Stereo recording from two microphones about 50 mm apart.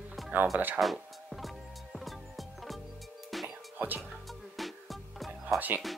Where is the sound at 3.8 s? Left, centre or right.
Right.